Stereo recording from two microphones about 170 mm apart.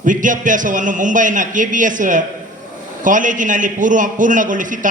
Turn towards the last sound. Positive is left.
turn(degrees=-50)  # may be behind; listen again after turning